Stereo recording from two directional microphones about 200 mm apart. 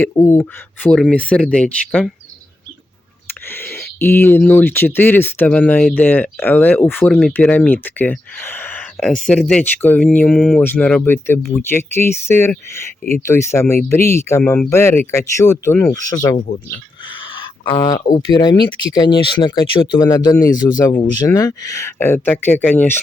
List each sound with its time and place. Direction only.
0.0 s speech: 10° left (ahead or behind)
3.5 s speech: 10° left (ahead or behind)
17.7 s speech: 20° left (ahead or behind)